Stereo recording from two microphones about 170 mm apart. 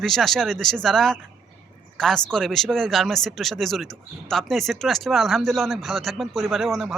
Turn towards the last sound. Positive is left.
turn(degrees=0)  # may be behind; listen again after turning